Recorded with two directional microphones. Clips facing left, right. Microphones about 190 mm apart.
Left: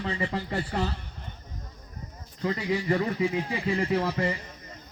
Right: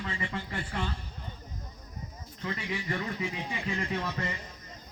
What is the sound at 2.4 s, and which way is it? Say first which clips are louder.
A man's voice: left 8 dB; 35° left (ahead or behind).